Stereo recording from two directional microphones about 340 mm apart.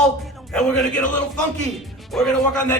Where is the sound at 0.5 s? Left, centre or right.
Centre.